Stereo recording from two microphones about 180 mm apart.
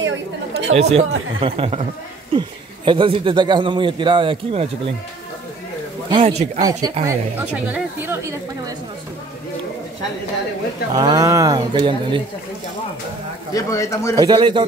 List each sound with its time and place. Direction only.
0.0 s speech: 90° right
0.7 s a man's voice: 35° right (ahead or behind)
6.0 s speech: 30° right (ahead or behind)
6.6 s a man's voice: 20° right (ahead or behind)
7.1 s a woman's voice: 5° right (ahead or behind)
11.0 s a man's voice: 20° right (ahead or behind)
13.5 s speech: 20° left (ahead or behind)
14.1 s a man's voice: 25° right (ahead or behind)